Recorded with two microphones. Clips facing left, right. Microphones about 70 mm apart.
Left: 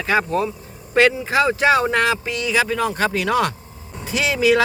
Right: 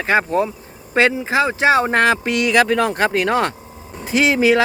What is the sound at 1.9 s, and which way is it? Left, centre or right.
Speech, right.